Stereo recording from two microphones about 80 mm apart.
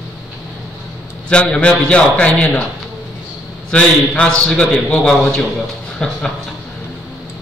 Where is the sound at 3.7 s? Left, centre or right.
Centre.